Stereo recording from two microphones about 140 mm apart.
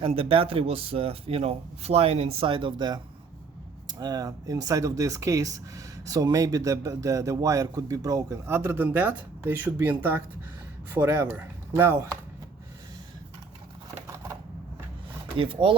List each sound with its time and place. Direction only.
0.0 s speech: 40° right (ahead or behind); by 12.0 s 20° right (ahead or behind)
14.1 s typewriter: 20° right (ahead or behind)
15.4 s speech: 40° right (ahead or behind)